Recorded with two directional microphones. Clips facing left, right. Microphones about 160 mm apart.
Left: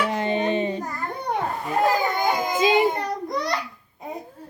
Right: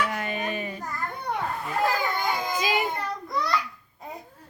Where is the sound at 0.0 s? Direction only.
25° left (ahead or behind).